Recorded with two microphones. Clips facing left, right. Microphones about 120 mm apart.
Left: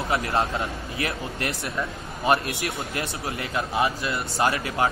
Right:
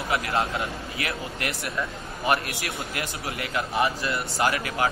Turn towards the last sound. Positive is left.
turn(degrees=25)  # may be behind; listen again after turning